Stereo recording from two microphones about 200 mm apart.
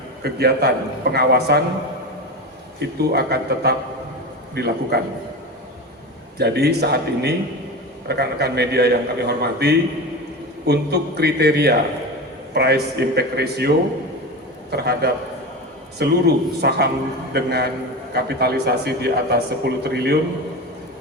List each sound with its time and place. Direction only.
0.2 s a man's voice: 55° right (ahead or behind)
2.7 s a man's voice: 55° right (ahead or behind)
6.4 s a man's voice: 55° right (ahead or behind)